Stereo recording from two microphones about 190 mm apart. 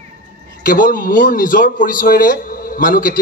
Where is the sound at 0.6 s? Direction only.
45° left (ahead or behind).